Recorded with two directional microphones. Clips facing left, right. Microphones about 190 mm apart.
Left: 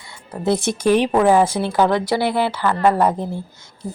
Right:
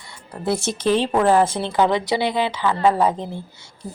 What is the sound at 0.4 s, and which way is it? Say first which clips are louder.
A woman's voice: left 3 dB; 15° left (ahead or behind).